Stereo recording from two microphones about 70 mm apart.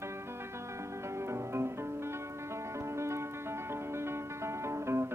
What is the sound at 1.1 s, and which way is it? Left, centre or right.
Music, right.